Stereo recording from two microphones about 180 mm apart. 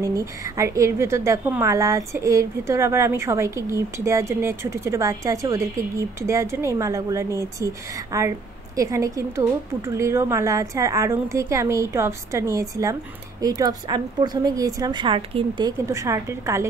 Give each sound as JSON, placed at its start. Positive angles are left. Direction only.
{"t": 0.0, "sound": "a woman's voice", "side_deg": -20}